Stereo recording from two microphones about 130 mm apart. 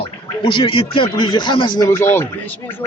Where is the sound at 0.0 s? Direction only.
40° left (ahead or behind).